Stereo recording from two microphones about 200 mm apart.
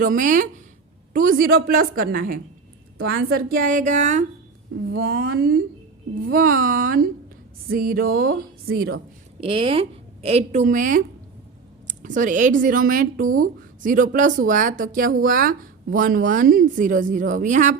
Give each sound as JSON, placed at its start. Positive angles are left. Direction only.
{"t": 0.0, "sound": "a woman's voice", "side_deg": -40}
{"t": 5.3, "sound": "a woman's voice", "side_deg": -55}
{"t": 9.4, "sound": "a woman's voice", "side_deg": -30}
{"t": 12.0, "sound": "a woman's voice", "side_deg": -40}